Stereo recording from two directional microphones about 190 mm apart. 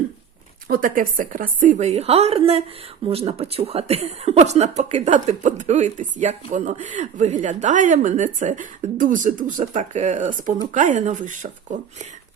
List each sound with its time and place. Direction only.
0.7 s speech: 45° right (ahead or behind)